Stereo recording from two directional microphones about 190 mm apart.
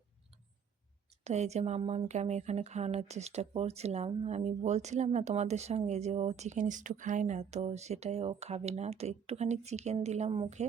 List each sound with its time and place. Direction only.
1.2 s speech: 35° right (ahead or behind)